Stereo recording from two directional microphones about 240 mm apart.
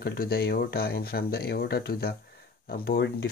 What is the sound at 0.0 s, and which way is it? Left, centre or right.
Speech, left.